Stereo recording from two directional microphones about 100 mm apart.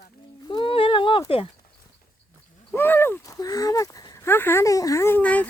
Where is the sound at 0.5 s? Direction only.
60° left (ahead or behind).